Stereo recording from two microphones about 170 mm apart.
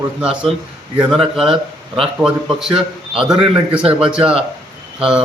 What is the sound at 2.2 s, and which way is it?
Speech, 5° right (ahead or behind).